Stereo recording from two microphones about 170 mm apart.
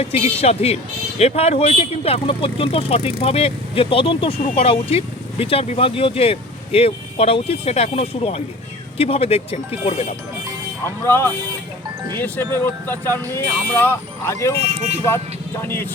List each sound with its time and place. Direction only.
0.0 s speech: 35° left (ahead or behind)
11.0 s speech: 15° left (ahead or behind)
14.8 s speech: 40° right (ahead or behind)
15.6 s speech: 15° left (ahead or behind)